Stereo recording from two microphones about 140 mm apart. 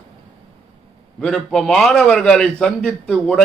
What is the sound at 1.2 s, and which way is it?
A man's voice, 5° left (ahead or behind).